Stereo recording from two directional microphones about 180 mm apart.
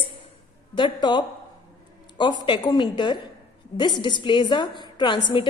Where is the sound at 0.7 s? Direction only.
25° left (ahead or behind).